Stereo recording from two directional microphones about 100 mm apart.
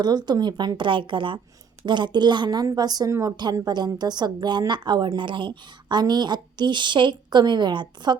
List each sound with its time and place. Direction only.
0.0 s a woman's voice: 45° right (ahead or behind)